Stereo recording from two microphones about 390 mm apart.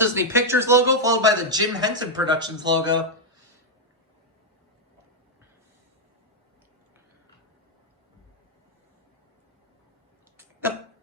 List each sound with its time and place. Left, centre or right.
0.0 s a man's voice: centre